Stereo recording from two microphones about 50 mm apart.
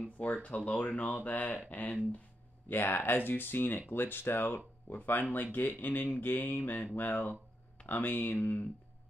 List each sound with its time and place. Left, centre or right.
0.3 s speech: left
2.7 s speech: left
4.8 s speech: left